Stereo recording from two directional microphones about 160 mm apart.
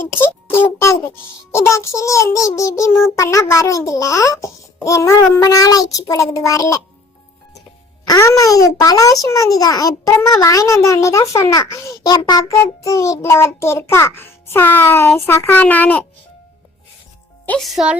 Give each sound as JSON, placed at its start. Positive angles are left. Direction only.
{"t": 0.4, "sound": "a child's voice", "side_deg": 15}
{"t": 8.0, "sound": "a child's voice", "side_deg": 20}
{"t": 17.4, "sound": "speech", "side_deg": 5}